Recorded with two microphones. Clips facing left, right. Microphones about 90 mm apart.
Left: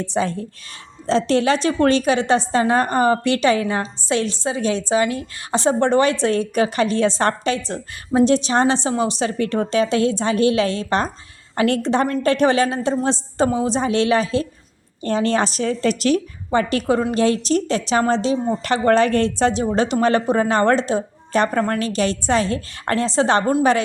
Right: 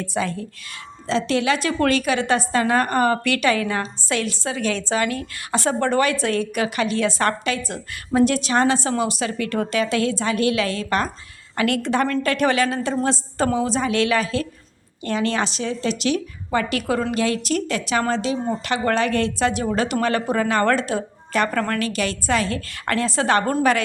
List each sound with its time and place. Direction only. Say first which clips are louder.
0.0 s a woman's voice: left 3 dB; 30° left (ahead or behind)
16.5 s a woman's voice: left 4 dB; 30° left (ahead or behind)